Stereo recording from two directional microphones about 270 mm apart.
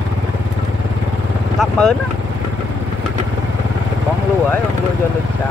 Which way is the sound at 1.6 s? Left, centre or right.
Centre.